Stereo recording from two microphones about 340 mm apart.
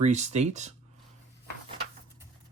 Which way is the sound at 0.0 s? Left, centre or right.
Centre.